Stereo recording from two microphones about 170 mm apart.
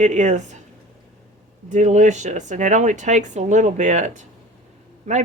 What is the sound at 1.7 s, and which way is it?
Speech, 45° right (ahead or behind).